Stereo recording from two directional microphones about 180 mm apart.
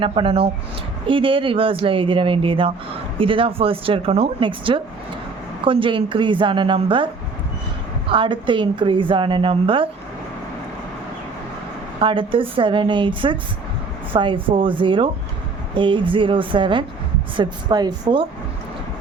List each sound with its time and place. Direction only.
0.0 s a woman's voice: 30° right (ahead or behind)
11.9 s a woman's voice: 30° right (ahead or behind)